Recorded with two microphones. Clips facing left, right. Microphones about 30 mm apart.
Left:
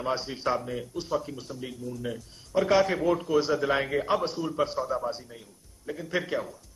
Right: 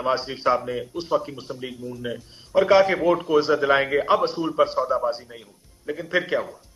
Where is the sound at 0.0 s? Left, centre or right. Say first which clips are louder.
Right 6 dB; right.